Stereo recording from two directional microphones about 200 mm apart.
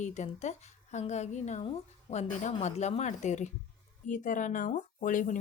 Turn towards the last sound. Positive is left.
turn(degrees=40)  # may be behind; listen again after turning